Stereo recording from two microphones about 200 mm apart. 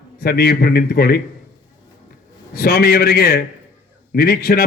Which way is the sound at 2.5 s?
50° left (ahead or behind).